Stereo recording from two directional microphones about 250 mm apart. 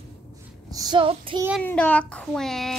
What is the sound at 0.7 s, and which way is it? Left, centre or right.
Child singing, centre.